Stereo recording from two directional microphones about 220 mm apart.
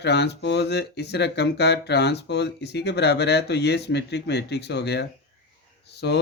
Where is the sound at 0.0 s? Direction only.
50° left (ahead or behind).